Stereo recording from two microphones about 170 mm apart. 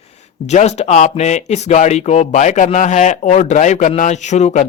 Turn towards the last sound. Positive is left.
turn(degrees=45)  # may be behind; listen again after turning